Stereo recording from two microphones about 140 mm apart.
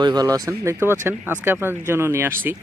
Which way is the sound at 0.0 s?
30° right (ahead or behind).